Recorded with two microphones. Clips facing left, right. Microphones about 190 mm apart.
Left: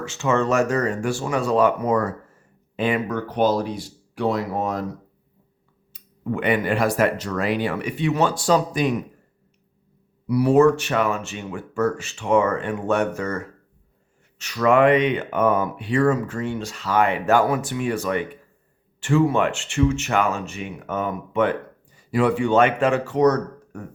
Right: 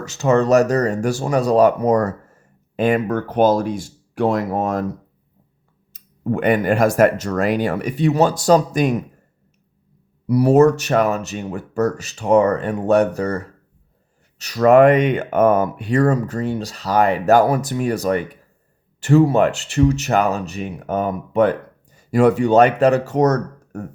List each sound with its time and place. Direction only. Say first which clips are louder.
0.0 s speech: right 5 dB; 40° right (ahead or behind)
5.9 s speech: right 5 dB; 45° right (ahead or behind)
10.2 s speech: right 3 dB; 40° right (ahead or behind)